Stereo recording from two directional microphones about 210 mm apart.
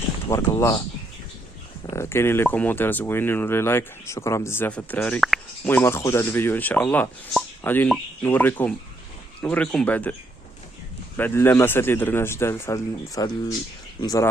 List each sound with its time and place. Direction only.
0.3 s speech: 15° left (ahead or behind)
1.9 s speech: 10° left (ahead or behind)
11.2 s speech: 10° left (ahead or behind)